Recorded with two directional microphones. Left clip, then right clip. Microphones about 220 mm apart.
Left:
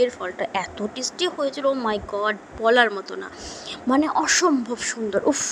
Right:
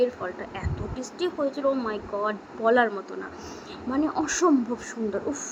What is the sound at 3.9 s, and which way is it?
Speech, 40° left (ahead or behind).